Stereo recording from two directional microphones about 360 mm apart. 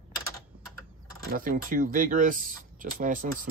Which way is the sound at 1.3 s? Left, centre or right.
Right.